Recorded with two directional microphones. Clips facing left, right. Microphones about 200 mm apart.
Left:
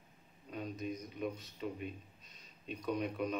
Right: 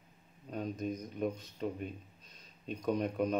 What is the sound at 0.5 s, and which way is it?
Speech, 45° right (ahead or behind).